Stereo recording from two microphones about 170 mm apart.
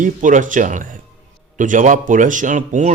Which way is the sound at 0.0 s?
50° right (ahead or behind).